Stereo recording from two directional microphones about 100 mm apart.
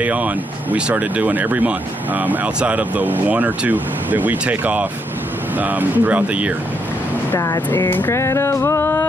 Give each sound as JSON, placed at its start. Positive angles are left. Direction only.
{"t": 0.0, "sound": "speech", "side_deg": -15}
{"t": 7.3, "sound": "speech", "side_deg": 30}
{"t": 7.7, "sound": "music", "side_deg": 20}